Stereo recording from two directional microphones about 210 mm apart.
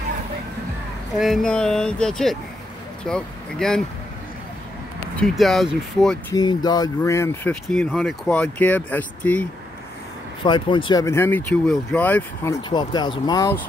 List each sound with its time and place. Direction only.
1.1 s speech: centre (ahead or behind)
5.2 s speech: centre (ahead or behind)
6.3 s speech: 20° left (ahead or behind)
10.4 s speech: 25° left (ahead or behind)
12.6 s speech: 20° left (ahead or behind)